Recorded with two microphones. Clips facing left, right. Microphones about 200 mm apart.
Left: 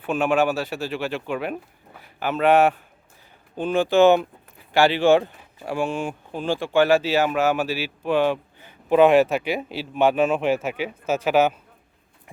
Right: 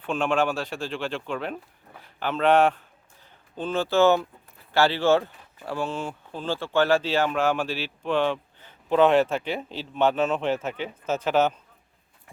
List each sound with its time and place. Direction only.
0.0 s speech: 5° left (ahead or behind)